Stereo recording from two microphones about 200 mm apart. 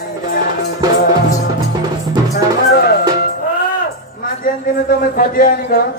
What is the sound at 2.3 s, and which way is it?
Music, 55° left (ahead or behind).